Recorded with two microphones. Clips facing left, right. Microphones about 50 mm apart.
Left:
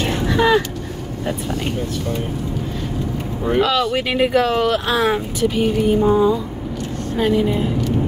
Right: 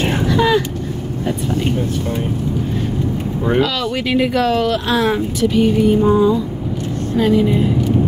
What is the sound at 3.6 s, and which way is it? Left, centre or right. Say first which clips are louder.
Speech: left 1 dB; centre.